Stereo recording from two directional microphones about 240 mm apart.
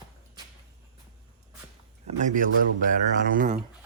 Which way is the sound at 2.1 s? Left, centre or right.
Right.